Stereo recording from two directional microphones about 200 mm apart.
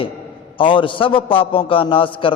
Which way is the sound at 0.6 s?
25° left (ahead or behind).